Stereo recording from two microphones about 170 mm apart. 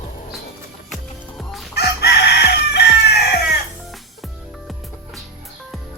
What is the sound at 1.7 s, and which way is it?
Chicken, 75° left (ahead or behind).